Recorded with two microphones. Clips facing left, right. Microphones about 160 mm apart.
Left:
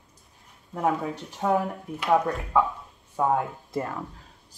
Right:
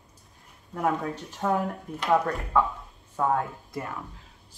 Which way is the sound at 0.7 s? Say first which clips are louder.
Left 1 dB; 5° left (ahead or behind).